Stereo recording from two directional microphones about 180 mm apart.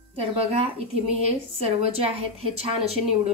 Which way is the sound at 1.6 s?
35° right (ahead or behind).